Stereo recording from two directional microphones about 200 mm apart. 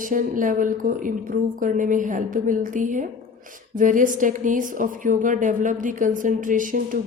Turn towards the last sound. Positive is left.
turn(degrees=-40)  # may be behind; listen again after turning